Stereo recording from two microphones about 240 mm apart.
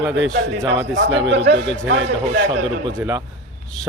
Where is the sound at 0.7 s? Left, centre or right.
Right.